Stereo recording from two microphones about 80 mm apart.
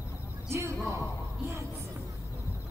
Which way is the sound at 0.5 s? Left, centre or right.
Right.